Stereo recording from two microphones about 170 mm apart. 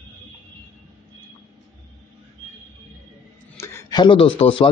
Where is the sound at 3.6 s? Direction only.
15° left (ahead or behind); by 4.7 s 30° left (ahead or behind).